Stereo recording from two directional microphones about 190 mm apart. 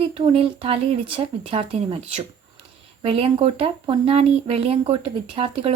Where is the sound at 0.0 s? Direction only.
30° right (ahead or behind).